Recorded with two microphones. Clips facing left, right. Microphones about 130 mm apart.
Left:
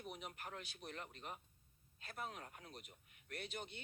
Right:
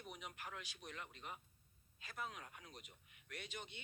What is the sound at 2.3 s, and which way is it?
Speech, 40° left (ahead or behind).